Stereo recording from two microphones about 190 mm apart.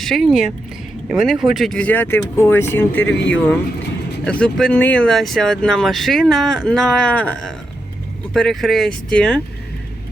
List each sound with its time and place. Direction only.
0.0 s speech: centre (ahead or behind)